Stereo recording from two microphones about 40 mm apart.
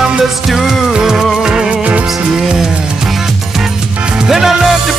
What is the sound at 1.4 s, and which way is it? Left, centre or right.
Music, centre.